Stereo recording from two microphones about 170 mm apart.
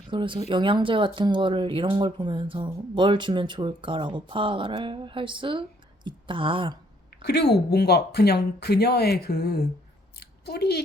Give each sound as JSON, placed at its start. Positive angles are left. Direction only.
{"t": 0.1, "sound": "speech", "side_deg": -30}
{"t": 7.2, "sound": "speech", "side_deg": 75}
{"t": 10.2, "sound": "a sound", "side_deg": 70}